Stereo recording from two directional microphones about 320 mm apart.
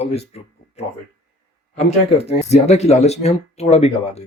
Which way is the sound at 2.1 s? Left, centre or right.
Centre.